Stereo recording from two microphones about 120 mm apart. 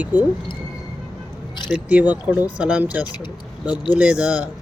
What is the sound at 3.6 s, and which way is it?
Speech, 35° left (ahead or behind).